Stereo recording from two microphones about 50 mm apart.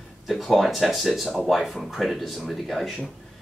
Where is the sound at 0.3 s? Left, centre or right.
Centre.